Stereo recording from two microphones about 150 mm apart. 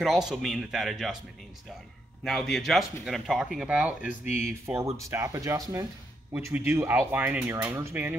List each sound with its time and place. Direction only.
0.0 s speech: centre (ahead or behind)
2.2 s speech: 5° left (ahead or behind); by 8.2 s 15° right (ahead or behind)